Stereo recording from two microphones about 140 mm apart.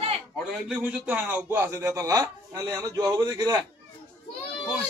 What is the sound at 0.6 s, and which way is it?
A man's voice, 10° right (ahead or behind).